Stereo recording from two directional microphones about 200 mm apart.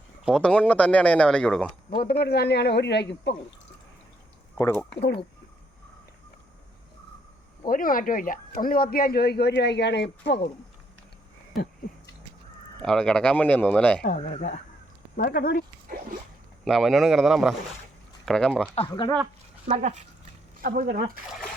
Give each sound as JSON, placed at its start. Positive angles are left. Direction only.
{"t": 0.3, "sound": "speech", "side_deg": 5}
{"t": 1.9, "sound": "speech", "side_deg": 50}
{"t": 4.5, "sound": "speech", "side_deg": 10}
{"t": 7.7, "sound": "speech", "side_deg": 45}
{"t": 12.8, "sound": "speech", "side_deg": 5}
{"t": 14.3, "sound": "speech", "side_deg": 35}
{"t": 15.1, "sound": "speech", "side_deg": 45}
{"t": 16.6, "sound": "speech", "side_deg": 0}
{"t": 18.7, "sound": "speech", "side_deg": 25}
{"t": 19.6, "sound": "speech", "side_deg": -35}
{"t": 20.6, "sound": "speech", "side_deg": -45}